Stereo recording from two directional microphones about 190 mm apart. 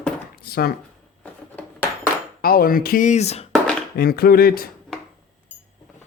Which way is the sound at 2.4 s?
50° left (ahead or behind).